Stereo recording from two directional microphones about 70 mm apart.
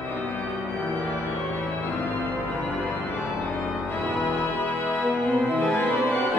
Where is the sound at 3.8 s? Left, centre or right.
Left.